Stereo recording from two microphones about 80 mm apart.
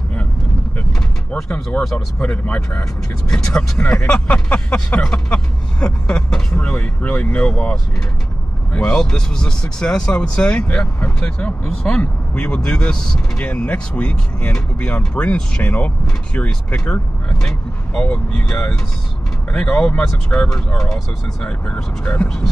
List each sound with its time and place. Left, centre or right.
1.3 s speech: centre
1.9 s speech: centre
2.2 s speech: centre
8.7 s speech: centre